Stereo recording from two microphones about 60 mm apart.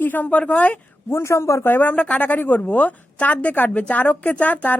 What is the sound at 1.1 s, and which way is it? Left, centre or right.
Speech, left.